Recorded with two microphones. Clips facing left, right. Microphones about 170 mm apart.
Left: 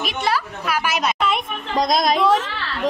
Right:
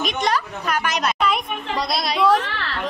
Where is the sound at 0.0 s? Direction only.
5° left (ahead or behind).